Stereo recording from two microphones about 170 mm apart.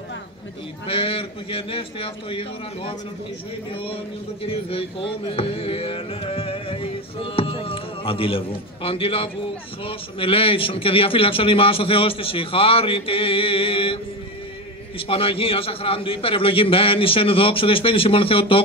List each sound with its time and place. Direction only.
0.8 s speech: 35° left (ahead or behind)
15.0 s speech: 35° left (ahead or behind)